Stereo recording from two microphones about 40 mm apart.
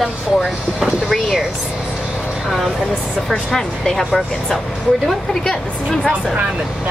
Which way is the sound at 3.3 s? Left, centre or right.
Centre.